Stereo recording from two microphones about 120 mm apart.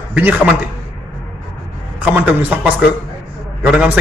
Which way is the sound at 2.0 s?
15° right (ahead or behind).